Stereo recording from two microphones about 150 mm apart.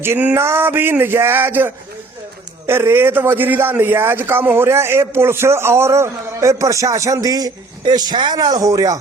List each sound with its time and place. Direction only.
0.0 s a man's voice: 15° right (ahead or behind)